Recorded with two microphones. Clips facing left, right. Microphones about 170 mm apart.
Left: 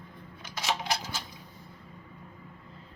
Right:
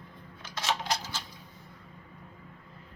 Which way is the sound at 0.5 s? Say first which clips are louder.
Even; 10° left (ahead or behind).